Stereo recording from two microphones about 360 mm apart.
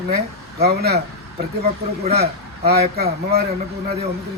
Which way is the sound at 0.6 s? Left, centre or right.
Right.